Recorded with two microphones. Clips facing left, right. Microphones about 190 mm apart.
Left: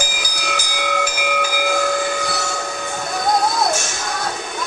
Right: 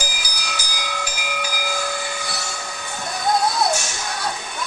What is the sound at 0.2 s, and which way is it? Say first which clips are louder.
Train: left 6 dB; 50° left (ahead or behind).